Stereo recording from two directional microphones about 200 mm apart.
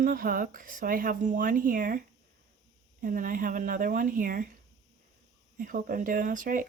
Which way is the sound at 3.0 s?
45° right (ahead or behind).